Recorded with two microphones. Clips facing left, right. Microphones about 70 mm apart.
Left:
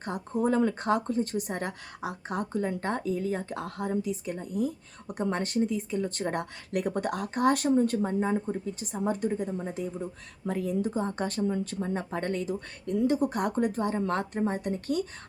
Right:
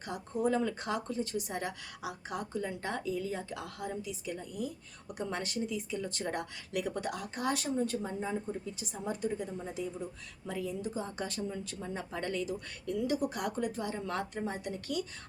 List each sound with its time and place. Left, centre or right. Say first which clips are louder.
0.0 s speech: left 4 dB; left